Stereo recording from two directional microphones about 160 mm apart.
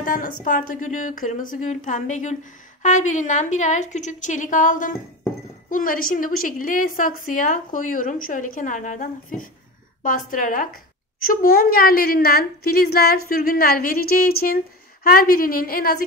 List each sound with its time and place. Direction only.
0.0 s a woman's voice: 60° left (ahead or behind)